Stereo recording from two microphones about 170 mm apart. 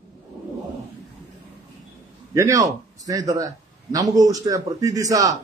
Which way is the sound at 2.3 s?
20° right (ahead or behind).